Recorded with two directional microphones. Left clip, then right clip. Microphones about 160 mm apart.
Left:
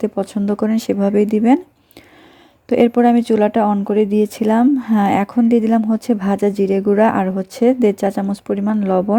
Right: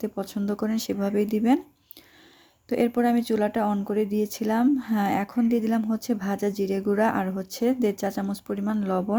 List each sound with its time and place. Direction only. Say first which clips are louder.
0.0 s speech: left 10 dB; 40° left (ahead or behind)
2.6 s speech: left 10 dB; 45° left (ahead or behind)